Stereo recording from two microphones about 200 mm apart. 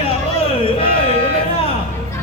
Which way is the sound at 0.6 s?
30° left (ahead or behind).